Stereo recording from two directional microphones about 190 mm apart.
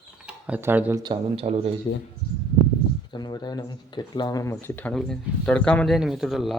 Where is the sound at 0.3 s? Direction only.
5° right (ahead or behind).